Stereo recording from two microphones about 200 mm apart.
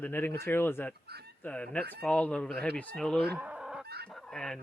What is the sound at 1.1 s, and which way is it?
Fowl, 55° right (ahead or behind).